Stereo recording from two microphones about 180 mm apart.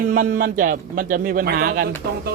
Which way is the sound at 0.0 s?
50° right (ahead or behind).